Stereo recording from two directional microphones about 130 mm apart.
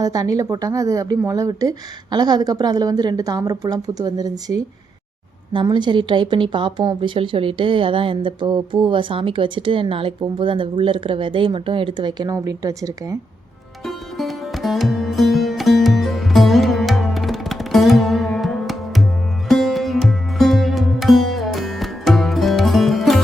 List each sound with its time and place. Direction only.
0.0 s a woman's voice: 25° right (ahead or behind)
12.3 s a woman's voice: 25° right (ahead or behind)
13.8 s music: centre (ahead or behind)
19.5 s sitar: centre (ahead or behind)